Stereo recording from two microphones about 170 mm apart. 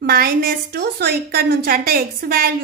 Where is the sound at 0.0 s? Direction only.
60° right (ahead or behind).